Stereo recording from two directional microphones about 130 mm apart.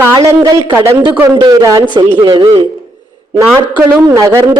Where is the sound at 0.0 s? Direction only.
25° right (ahead or behind).